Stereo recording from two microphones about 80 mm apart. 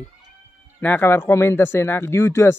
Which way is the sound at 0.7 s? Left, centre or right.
Left.